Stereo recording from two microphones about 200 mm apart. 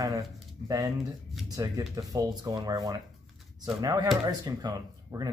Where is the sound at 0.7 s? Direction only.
15° right (ahead or behind).